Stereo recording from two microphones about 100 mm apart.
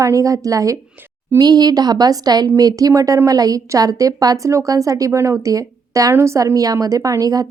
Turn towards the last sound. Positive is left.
turn(degrees=-35)  # may be behind; listen again after turning